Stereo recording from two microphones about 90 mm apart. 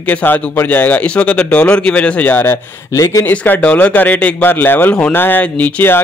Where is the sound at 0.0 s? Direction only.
20° left (ahead or behind).